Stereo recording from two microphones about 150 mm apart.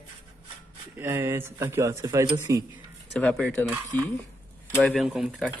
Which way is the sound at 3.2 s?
10° left (ahead or behind).